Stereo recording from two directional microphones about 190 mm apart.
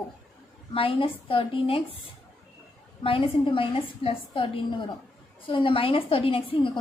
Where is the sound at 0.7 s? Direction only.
30° left (ahead or behind).